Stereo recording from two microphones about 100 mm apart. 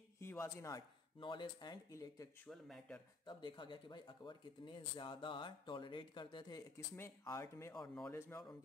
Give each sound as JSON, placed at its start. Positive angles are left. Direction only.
{"t": 0.2, "sound": "speech", "side_deg": 25}
{"t": 1.2, "sound": "speech", "side_deg": 50}
{"t": 1.9, "sound": "speech", "side_deg": 30}
{"t": 2.5, "sound": "speech", "side_deg": 0}
{"t": 3.3, "sound": "speech", "side_deg": 50}
{"t": 7.0, "sound": "speech", "side_deg": 30}
{"t": 7.7, "sound": "speech", "side_deg": 10}
{"t": 8.1, "sound": "speech", "side_deg": 25}